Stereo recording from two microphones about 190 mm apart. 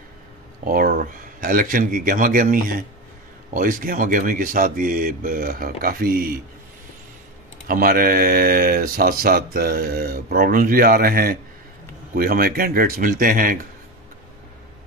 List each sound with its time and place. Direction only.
0.7 s speech: 50° right (ahead or behind)
7.6 s speech: 50° right (ahead or behind)